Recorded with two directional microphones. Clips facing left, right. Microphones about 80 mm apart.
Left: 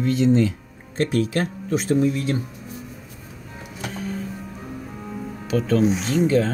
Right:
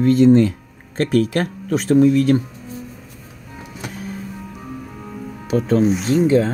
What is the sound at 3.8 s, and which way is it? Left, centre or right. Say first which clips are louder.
Music: left 1 dB; centre.